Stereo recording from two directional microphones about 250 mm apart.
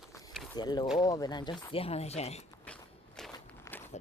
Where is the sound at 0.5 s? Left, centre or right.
Centre.